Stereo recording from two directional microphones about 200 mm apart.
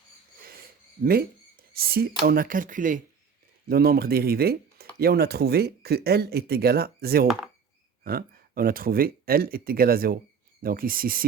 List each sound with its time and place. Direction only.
1.7 s speech: 50° right (ahead or behind)